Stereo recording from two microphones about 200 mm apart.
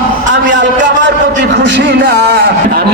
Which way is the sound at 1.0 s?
60° right (ahead or behind).